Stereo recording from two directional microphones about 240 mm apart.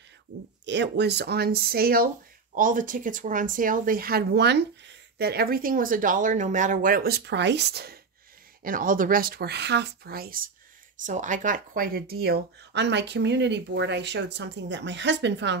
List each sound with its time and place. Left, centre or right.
0.7 s speech: right